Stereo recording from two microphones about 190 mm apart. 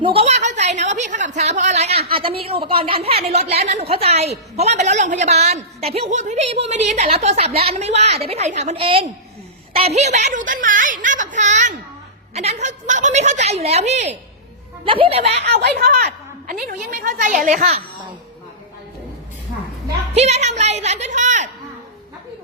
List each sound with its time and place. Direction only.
0.0 s a sound: 30° right (ahead or behind)
1.4 s a woman's voice: 40° right (ahead or behind)
4.6 s a sound: 35° right (ahead or behind)
9.8 s speech: 35° right (ahead or behind)
15.6 s a woman's voice: 60° right (ahead or behind); by 17.8 s 35° right (ahead or behind)
20.1 s speech: 35° right (ahead or behind)